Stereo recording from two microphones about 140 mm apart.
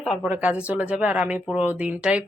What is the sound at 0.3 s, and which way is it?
Speech, 10° right (ahead or behind).